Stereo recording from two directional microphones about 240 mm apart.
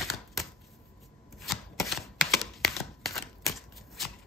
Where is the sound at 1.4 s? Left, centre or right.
Centre.